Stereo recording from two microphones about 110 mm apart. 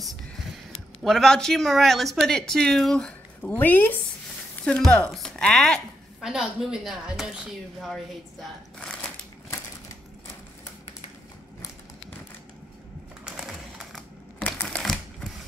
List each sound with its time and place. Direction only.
1.0 s a woman's voice: 5° left (ahead or behind)
6.2 s speech: 5° right (ahead or behind)
13.2 s a sound: 5° right (ahead or behind)
14.4 s typewriter: 10° left (ahead or behind)